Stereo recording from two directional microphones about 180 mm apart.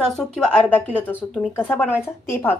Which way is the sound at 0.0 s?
5° left (ahead or behind).